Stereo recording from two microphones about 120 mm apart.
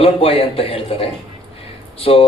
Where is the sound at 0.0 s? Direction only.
55° left (ahead or behind).